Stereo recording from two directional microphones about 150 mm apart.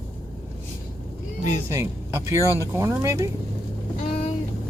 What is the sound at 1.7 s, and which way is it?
Speech, 20° right (ahead or behind).